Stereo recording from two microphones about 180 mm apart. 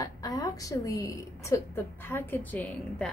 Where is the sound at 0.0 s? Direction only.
20° left (ahead or behind).